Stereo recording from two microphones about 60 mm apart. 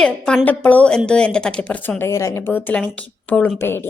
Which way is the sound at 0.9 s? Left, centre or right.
Centre.